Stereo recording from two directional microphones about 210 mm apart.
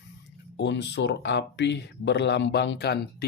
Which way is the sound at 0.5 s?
55° left (ahead or behind).